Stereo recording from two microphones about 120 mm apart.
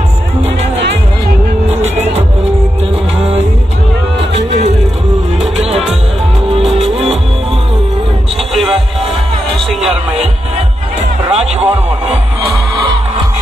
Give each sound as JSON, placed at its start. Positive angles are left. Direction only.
{"t": 1.7, "sound": "music", "side_deg": -65}
{"t": 6.6, "sound": "music", "side_deg": 0}
{"t": 11.2, "sound": "music", "side_deg": -60}